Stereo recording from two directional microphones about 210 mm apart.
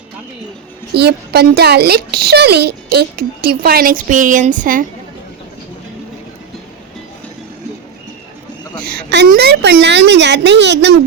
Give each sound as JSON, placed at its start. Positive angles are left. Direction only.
{"t": 0.9, "sound": "a woman's voice", "side_deg": -50}
{"t": 8.8, "sound": "a woman's voice", "side_deg": -45}